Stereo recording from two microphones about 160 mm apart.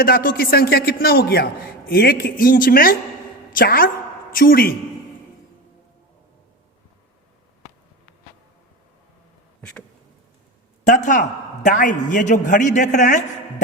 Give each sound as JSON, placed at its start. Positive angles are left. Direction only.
{"t": 0.0, "sound": "a man's voice", "side_deg": 65}
{"t": 9.6, "sound": "a sound", "side_deg": 5}
{"t": 10.8, "sound": "a man's voice", "side_deg": 50}